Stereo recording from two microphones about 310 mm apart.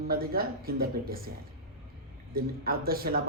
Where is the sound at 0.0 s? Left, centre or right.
Right.